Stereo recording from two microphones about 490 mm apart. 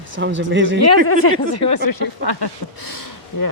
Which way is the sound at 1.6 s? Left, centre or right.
Left.